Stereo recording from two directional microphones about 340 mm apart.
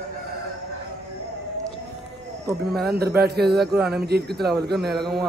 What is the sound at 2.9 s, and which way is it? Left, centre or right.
Speech, right.